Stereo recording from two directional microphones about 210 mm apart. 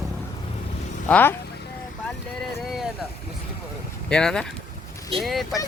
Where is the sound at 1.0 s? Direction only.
5° left (ahead or behind).